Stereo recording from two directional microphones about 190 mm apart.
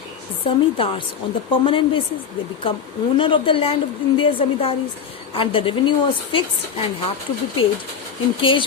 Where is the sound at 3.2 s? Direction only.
25° left (ahead or behind).